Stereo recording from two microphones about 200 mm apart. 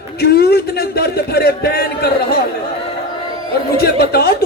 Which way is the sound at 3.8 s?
50° left (ahead or behind).